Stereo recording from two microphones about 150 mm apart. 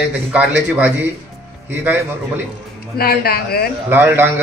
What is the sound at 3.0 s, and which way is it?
Speech, 90° left.